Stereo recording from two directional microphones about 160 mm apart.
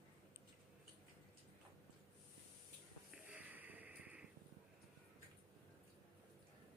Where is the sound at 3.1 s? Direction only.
5° right (ahead or behind).